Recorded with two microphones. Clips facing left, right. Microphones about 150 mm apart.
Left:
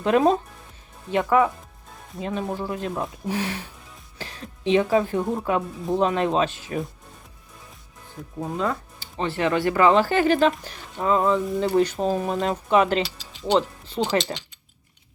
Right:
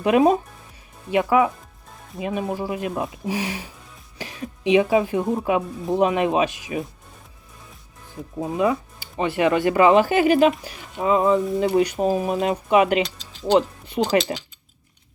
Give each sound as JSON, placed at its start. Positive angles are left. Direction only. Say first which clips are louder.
{"t": 0.0, "sound": "a woman's voice", "louder": "right 2 dB", "side_deg": -10}
{"t": 8.4, "sound": "speech", "louder": "right 5 dB", "side_deg": -10}
{"t": 13.0, "sound": "mechanisms", "louder": "right 3 dB", "side_deg": 5}
{"t": 14.0, "sound": "speech", "louder": "right 3 dB", "side_deg": -10}